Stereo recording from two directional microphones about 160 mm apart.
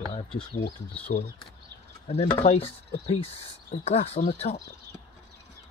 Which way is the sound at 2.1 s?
35° left (ahead or behind).